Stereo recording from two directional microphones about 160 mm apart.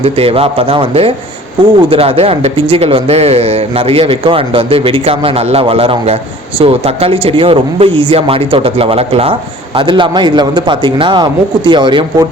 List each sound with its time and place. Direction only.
0.0 s a man's voice: 35° right (ahead or behind)